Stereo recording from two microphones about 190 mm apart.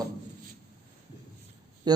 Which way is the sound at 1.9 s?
20° right (ahead or behind).